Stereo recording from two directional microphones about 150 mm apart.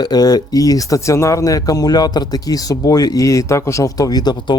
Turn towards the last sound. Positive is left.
turn(degrees=30)  # may be behind; listen again after turning